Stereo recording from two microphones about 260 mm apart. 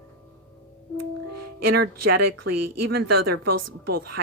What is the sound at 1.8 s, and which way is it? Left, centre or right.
A woman's voice, right.